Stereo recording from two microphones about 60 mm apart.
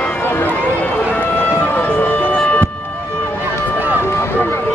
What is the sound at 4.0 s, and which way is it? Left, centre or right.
Run, left.